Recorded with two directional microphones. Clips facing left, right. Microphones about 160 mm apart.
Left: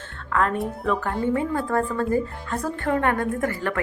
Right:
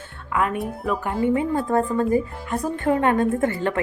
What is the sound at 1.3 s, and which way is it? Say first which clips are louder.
A woman's voice: right 2 dB; 20° right (ahead or behind).